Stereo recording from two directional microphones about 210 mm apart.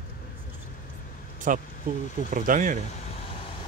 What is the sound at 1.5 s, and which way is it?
Speech, 40° right (ahead or behind).